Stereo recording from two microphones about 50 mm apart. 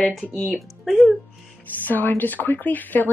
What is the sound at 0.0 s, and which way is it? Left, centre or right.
Speech, centre.